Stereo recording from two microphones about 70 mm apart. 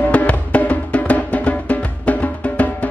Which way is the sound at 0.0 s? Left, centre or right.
Left.